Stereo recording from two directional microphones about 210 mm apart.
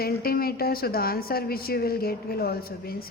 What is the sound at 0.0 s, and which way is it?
A woman's voice, 45° left (ahead or behind).